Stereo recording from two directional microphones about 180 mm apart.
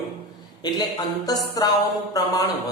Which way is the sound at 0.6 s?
20° left (ahead or behind).